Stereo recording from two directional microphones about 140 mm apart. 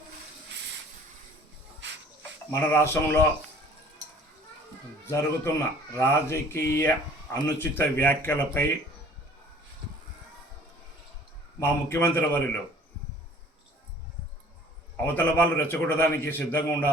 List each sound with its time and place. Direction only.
2.5 s speech: 15° left (ahead or behind)
5.0 s speech: 20° left (ahead or behind)
11.6 s speech: 15° left (ahead or behind)
15.0 s speech: 15° left (ahead or behind)